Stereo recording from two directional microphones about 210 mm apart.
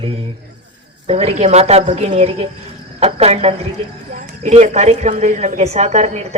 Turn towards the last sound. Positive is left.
turn(degrees=-30)  # may be behind; listen again after turning